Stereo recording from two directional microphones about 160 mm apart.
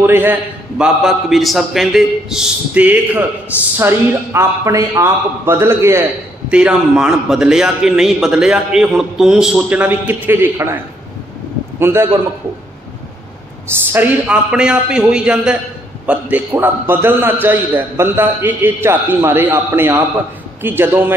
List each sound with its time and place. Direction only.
0.0 s a man's voice: 15° right (ahead or behind)
6.5 s a man's voice: 5° right (ahead or behind)
11.8 s a man's voice: 15° right (ahead or behind)
13.9 s a man's voice: 10° right (ahead or behind)